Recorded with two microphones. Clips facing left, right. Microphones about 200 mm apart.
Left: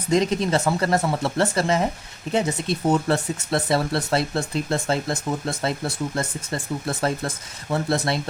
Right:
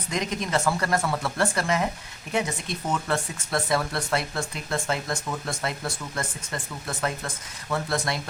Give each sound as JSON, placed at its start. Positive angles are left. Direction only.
{"t": 0.1, "sound": "speech", "side_deg": 30}